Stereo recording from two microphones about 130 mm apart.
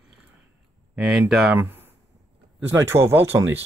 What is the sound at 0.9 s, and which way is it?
Speech, 5° right (ahead or behind).